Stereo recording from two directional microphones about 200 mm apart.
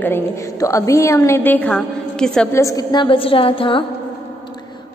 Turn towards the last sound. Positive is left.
turn(degrees=25)  # may be behind; listen again after turning